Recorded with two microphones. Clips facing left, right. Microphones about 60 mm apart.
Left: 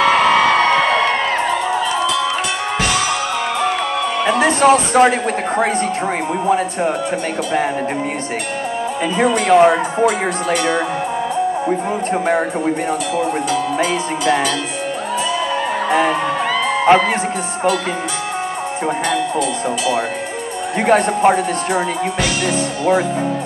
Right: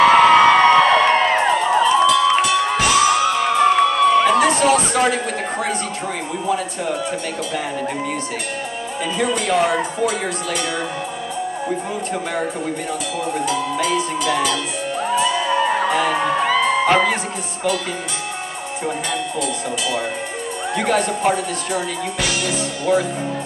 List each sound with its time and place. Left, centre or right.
0.1 s a sound: centre
1.4 s crowd: right
4.2 s music: left
6.4 s speech: left
9.2 s speech: left
12.1 s speech: left
15.9 s speech: left
16.2 s music: centre
16.8 s a man's voice: left
20.7 s speech: left